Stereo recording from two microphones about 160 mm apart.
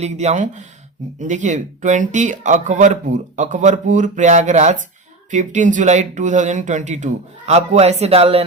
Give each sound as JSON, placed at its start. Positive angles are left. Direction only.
{"t": 0.0, "sound": "speech", "side_deg": -45}